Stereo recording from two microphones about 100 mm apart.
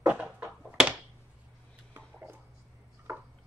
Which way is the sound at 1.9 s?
20° right (ahead or behind).